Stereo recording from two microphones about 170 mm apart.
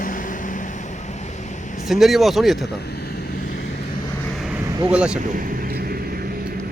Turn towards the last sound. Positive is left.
turn(degrees=-5)  # may be behind; listen again after turning